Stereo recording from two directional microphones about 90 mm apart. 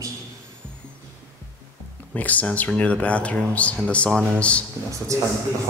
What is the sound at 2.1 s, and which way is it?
Speech, 15° left (ahead or behind).